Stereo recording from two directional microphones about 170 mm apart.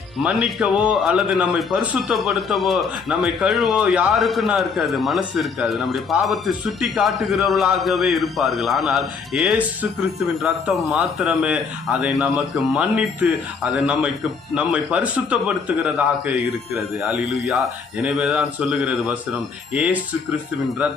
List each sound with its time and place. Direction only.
0.2 s speech: centre (ahead or behind)
10.9 s a man's voice: 5° right (ahead or behind)